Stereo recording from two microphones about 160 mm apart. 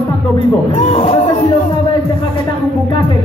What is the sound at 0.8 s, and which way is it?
Speech, 40° left (ahead or behind).